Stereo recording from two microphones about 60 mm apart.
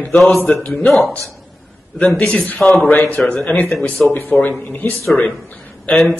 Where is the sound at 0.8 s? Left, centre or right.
Centre.